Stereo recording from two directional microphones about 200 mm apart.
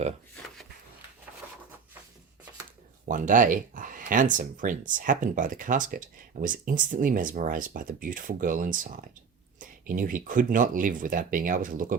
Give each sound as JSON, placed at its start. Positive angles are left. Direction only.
{"t": 0.4, "sound": "chopping", "side_deg": 5}
{"t": 1.4, "sound": "a sound", "side_deg": -10}
{"t": 3.1, "sound": "speech", "side_deg": -40}